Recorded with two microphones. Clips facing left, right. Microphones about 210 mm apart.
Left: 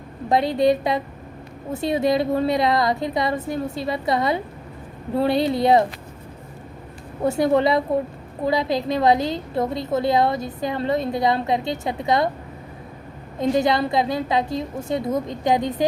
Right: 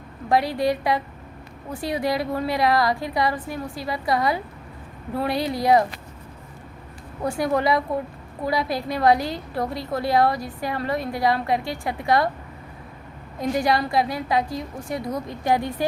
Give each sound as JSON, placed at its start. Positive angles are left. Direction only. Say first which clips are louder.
{"t": 0.3, "sound": "a woman's voice", "louder": "left 3 dB", "side_deg": 20}
{"t": 7.3, "sound": "a woman's voice", "louder": "left 4 dB", "side_deg": 25}
{"t": 13.4, "sound": "a woman's voice", "louder": "left 3 dB", "side_deg": 25}